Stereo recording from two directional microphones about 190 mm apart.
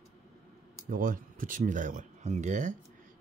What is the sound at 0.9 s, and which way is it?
Speech, 45° right (ahead or behind).